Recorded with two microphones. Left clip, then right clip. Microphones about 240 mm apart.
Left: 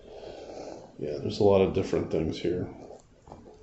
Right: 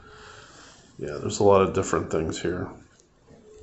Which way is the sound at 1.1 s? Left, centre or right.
Right.